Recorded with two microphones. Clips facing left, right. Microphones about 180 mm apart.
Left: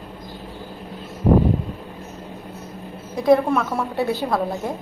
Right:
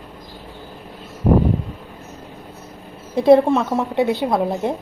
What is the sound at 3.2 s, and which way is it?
A woman's voice, 25° right (ahead or behind).